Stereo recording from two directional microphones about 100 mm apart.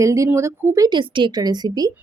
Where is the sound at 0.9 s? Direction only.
55° right (ahead or behind).